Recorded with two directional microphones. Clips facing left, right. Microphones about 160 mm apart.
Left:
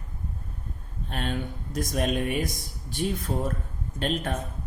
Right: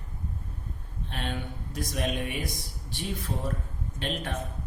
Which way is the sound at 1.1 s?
45° left (ahead or behind).